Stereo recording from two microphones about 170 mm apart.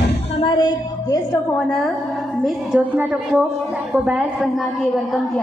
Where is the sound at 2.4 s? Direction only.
5° right (ahead or behind).